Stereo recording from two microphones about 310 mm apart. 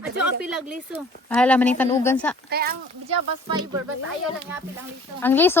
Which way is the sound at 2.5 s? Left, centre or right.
Right.